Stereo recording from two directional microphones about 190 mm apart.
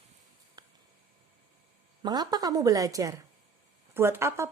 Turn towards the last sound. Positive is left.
turn(degrees=-15)  # may be behind; listen again after turning